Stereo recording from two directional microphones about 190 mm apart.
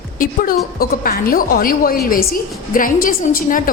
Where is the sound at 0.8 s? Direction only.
50° left (ahead or behind).